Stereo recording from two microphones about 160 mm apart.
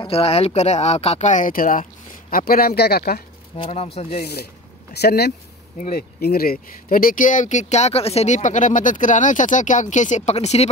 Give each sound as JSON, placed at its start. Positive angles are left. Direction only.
{"t": 0.0, "sound": "speech", "side_deg": 35}
{"t": 3.5, "sound": "speech", "side_deg": 35}
{"t": 4.2, "sound": "speech", "side_deg": 80}
{"t": 5.8, "sound": "speech", "side_deg": 65}